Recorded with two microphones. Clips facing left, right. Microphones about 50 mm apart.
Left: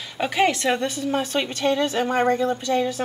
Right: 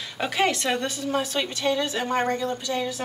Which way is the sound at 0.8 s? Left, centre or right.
Left.